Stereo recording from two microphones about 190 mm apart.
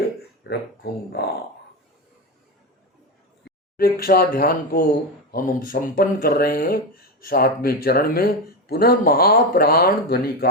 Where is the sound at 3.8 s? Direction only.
50° left (ahead or behind).